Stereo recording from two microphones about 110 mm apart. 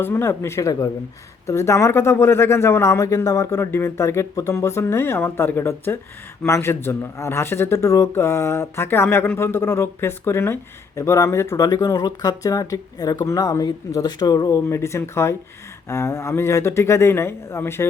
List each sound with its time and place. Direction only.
0.0 s speech: 20° left (ahead or behind)